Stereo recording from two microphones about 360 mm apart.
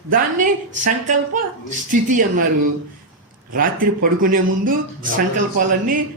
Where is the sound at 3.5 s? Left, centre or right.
Right.